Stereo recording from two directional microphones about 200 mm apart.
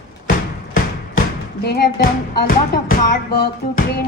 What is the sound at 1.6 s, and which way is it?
Speech, 55° left (ahead or behind).